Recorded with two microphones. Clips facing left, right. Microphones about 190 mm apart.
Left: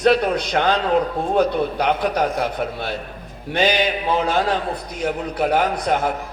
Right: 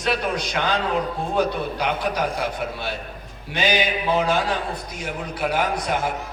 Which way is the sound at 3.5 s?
55° left (ahead or behind).